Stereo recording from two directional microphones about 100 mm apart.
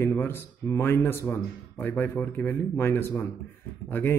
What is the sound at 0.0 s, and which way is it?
Speech, 25° left (ahead or behind).